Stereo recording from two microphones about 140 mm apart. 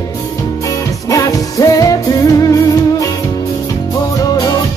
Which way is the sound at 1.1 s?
25° left (ahead or behind).